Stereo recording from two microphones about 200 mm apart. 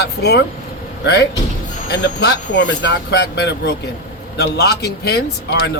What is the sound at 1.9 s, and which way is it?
Speech, 55° left (ahead or behind).